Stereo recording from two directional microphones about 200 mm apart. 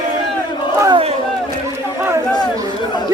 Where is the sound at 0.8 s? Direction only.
20° right (ahead or behind).